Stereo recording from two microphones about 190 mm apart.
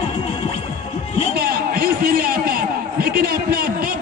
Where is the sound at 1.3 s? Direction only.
55° right (ahead or behind).